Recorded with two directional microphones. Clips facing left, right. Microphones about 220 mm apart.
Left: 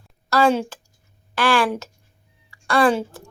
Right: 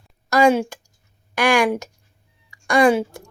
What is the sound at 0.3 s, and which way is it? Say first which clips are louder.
A woman's voice: right 2 dB; 15° right (ahead or behind).